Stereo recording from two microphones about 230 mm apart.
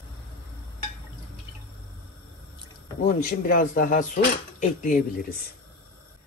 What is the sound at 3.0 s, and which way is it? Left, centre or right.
Speech, left.